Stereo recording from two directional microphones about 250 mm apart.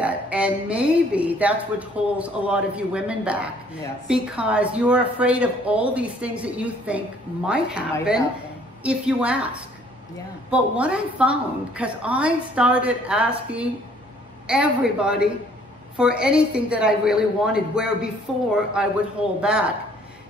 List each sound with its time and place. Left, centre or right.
0.0 s speech: centre
8.8 s speech: centre